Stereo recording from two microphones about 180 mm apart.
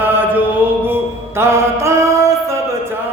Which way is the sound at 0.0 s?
10° right (ahead or behind).